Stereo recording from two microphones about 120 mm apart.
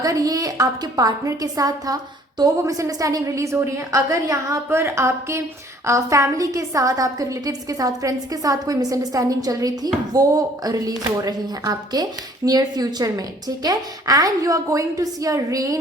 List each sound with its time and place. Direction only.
0.0 s a woman's voice: 30° right (ahead or behind)